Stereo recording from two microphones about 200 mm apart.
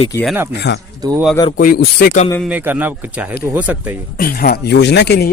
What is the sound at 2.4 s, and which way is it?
Speech, 5° right (ahead or behind).